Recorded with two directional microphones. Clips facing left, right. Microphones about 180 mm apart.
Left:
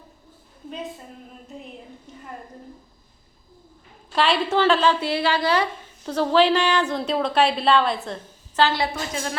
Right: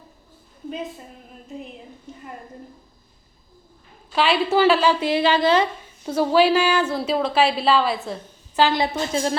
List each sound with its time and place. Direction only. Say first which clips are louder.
4.1 s a woman's voice: right 2 dB; 5° right (ahead or behind); by 5.6 s 20° right (ahead or behind)
6.1 s a woman's voice: right 1 dB; 10° right (ahead or behind)
8.6 s speech: right 2 dB; 20° right (ahead or behind)